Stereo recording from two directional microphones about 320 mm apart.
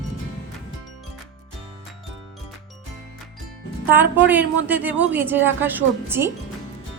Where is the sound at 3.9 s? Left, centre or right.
Centre.